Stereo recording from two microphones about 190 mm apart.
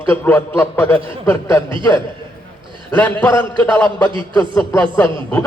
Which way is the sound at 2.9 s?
10° left (ahead or behind).